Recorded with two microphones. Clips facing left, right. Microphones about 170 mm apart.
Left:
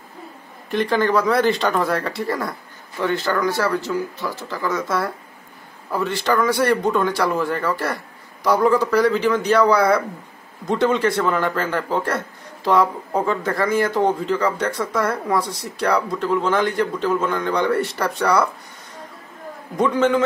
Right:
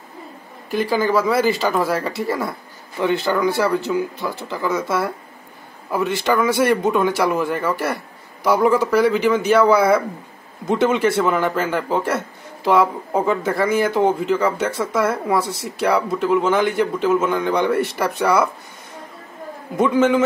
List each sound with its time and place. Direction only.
0.7 s speech: 5° right (ahead or behind)
3.0 s speech: 20° right (ahead or behind)
5.9 s a man's voice: 20° right (ahead or behind)
8.7 s speech: 5° right (ahead or behind)
19.8 s speech: 5° right (ahead or behind)